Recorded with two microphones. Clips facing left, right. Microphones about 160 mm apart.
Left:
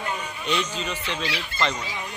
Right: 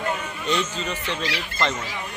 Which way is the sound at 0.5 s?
10° left (ahead or behind).